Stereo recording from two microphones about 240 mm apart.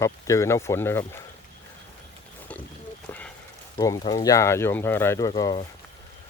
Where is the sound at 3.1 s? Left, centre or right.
Centre.